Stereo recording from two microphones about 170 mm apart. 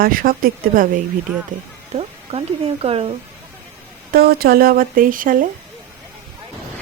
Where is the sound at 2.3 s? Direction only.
40° right (ahead or behind).